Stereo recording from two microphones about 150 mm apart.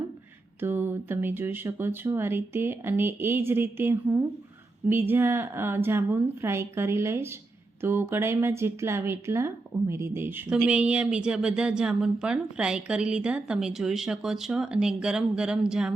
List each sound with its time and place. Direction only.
0.6 s a woman's voice: 15° right (ahead or behind)